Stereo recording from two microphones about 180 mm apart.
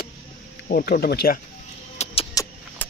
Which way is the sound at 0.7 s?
60° left (ahead or behind).